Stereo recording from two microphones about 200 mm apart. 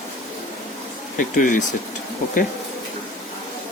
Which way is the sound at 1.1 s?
40° left (ahead or behind).